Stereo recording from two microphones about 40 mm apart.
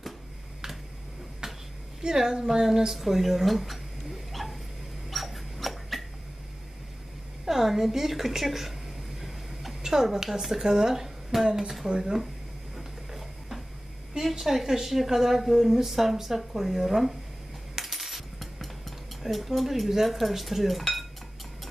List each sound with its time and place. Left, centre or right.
1.4 s a sound: centre
2.0 s a woman's voice: centre
3.0 s cutlery: centre
4.3 s dog: centre
7.4 s a woman's voice: centre
9.2 s a sound: centre
11.9 s a woman's voice: centre
12.7 s a sound: centre
14.2 s a woman's voice: centre
17.7 s coin: centre
19.2 s cutlery: centre